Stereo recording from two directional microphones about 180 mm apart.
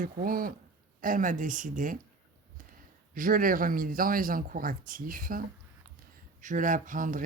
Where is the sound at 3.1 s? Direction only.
50° right (ahead or behind).